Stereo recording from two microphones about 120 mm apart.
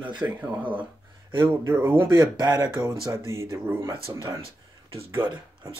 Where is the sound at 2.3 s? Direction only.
35° right (ahead or behind).